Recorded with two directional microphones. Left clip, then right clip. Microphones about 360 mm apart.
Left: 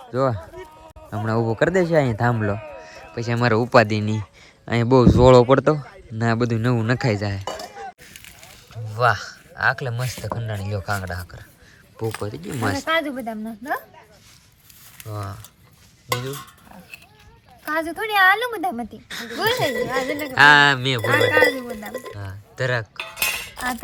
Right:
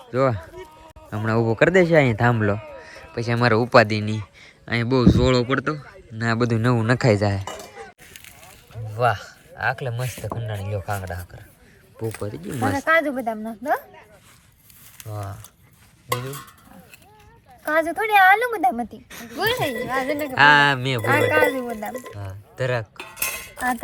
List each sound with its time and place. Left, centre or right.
0.0 s a man's voice: centre
14.9 s a woman's voice: centre
17.7 s a woman's voice: centre
21.1 s speech: centre
22.1 s speech: centre